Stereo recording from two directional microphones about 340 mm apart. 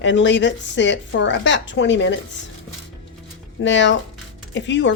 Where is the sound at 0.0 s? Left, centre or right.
Left.